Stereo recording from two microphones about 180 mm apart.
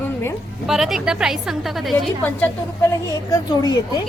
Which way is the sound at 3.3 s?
20° left (ahead or behind).